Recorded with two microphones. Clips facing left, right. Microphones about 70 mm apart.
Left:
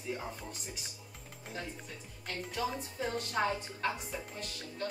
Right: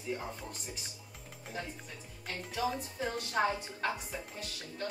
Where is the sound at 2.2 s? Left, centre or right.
Centre.